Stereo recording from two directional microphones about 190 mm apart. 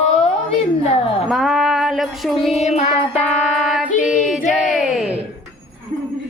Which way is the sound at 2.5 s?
35° left (ahead or behind).